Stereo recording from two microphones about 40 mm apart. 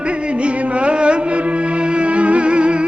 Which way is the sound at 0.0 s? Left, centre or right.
Right.